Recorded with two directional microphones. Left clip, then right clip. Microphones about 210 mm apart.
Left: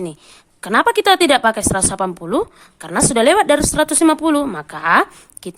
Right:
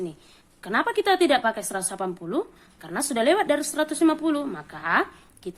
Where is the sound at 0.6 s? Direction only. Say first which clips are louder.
Left 10 dB; 35° left (ahead or behind).